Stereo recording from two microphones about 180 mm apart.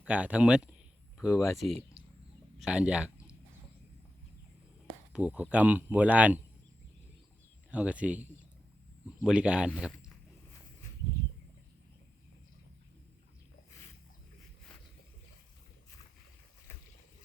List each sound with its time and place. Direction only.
0.0 s speech: 5° right (ahead or behind)
1.3 s speech: 15° left (ahead or behind)
1.7 s a sound: 30° right (ahead or behind)
2.6 s speech: 5° right (ahead or behind)
5.1 s speech: 5° right (ahead or behind)
7.7 s speech: 10° right (ahead or behind)
16.7 s boat: 15° left (ahead or behind)